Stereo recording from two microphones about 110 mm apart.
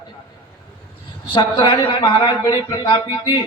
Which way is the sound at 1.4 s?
45° left (ahead or behind).